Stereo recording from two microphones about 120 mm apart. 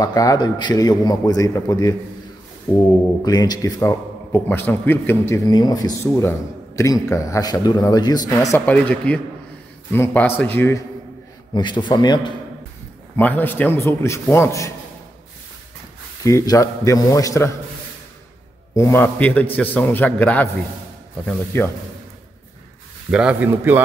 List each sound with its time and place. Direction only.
0.0 s a man's voice: 30° left (ahead or behind)
3.3 s a man's voice: 35° left (ahead or behind)
3.8 s a man's voice: 20° left (ahead or behind)
5.3 s a man's voice: 35° left (ahead or behind)
8.5 s a man's voice: 15° left (ahead or behind)
11.5 s a man's voice: 40° left (ahead or behind)
13.1 s a man's voice: 15° left (ahead or behind)
16.3 s a man's voice: 25° left (ahead or behind)
18.8 s a man's voice: 20° left (ahead or behind)
21.5 s a man's voice: 20° left (ahead or behind)
23.1 s a man's voice: 10° right (ahead or behind)